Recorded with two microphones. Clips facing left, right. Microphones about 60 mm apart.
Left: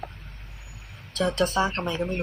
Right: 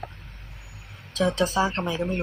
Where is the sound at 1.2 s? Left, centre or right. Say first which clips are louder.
Right 1 dB; centre.